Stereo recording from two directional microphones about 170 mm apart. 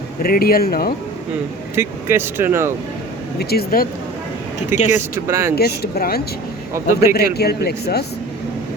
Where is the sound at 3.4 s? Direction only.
65° left (ahead or behind).